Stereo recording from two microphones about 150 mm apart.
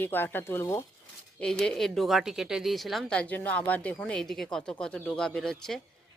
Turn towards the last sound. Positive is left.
turn(degrees=5)  # may be behind; listen again after turning